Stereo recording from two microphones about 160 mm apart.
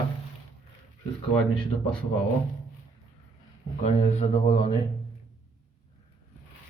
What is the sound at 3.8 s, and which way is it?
Speech, 40° left (ahead or behind).